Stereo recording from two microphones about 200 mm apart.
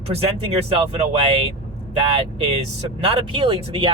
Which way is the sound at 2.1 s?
30° right (ahead or behind).